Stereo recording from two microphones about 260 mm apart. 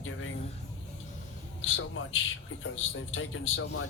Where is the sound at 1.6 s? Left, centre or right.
Left.